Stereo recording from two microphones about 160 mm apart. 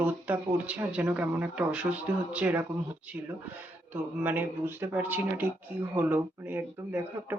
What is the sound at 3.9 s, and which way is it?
Speech, 10° right (ahead or behind).